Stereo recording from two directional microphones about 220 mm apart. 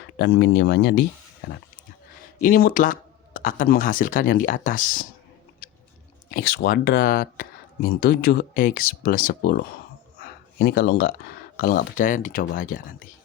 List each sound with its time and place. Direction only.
0.2 s speech: 50° left (ahead or behind)
2.4 s speech: 40° left (ahead or behind)
6.3 s speech: 45° left (ahead or behind)
10.2 s a sound: 45° left (ahead or behind)
11.5 s speech: 40° left (ahead or behind)